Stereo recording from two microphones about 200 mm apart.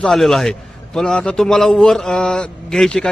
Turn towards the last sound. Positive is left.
turn(degrees=5)  # may be behind; listen again after turning